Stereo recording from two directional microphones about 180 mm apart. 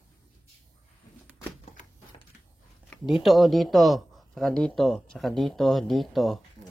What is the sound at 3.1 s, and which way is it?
Speech, centre (ahead or behind).